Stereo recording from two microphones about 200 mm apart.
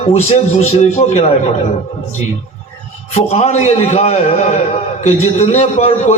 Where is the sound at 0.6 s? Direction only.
35° left (ahead or behind).